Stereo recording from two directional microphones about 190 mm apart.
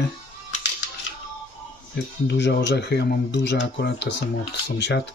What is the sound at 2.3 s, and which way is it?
Speech, 65° left (ahead or behind).